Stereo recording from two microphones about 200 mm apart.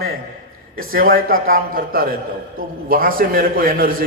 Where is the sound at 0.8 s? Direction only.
45° right (ahead or behind).